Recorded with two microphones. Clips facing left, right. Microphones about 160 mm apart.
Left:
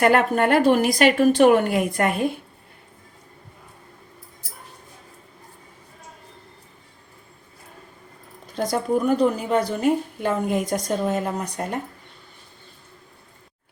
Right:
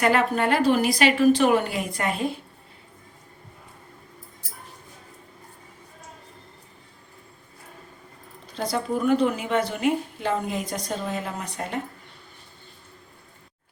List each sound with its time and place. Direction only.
0.0 s a woman's voice: 55° left (ahead or behind)
8.5 s a woman's voice: 45° left (ahead or behind)